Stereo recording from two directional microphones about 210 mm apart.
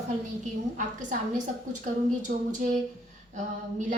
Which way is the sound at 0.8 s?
35° right (ahead or behind).